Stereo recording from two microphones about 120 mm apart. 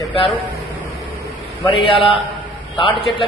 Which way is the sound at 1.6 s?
45° left (ahead or behind).